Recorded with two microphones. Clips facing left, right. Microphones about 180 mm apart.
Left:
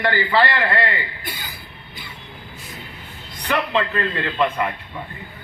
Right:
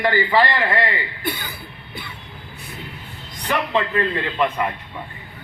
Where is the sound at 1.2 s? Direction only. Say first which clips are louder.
Right 7 dB; 60° right (ahead or behind).